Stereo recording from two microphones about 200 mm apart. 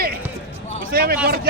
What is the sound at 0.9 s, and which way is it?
Speech, 50° right (ahead or behind).